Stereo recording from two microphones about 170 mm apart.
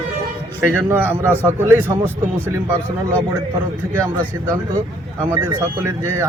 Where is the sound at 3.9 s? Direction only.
15° right (ahead or behind).